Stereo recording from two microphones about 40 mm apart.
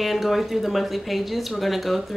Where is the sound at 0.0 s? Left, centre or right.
Centre.